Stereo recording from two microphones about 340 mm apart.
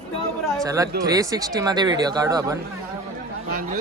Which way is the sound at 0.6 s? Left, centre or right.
Centre.